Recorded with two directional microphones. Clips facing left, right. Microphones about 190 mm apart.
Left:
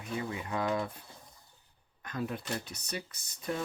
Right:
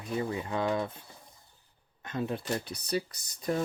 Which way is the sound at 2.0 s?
25° right (ahead or behind).